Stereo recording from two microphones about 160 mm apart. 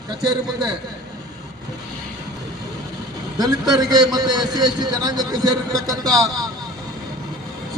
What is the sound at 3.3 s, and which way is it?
A man's voice, 25° right (ahead or behind).